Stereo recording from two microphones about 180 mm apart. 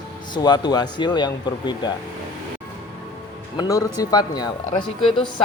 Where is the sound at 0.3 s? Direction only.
25° left (ahead or behind).